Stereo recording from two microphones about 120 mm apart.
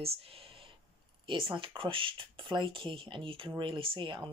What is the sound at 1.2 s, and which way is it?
Speech, 45° right (ahead or behind).